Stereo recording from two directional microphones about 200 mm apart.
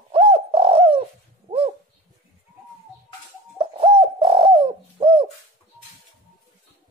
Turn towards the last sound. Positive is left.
turn(degrees=-25)  # may be behind; listen again after turning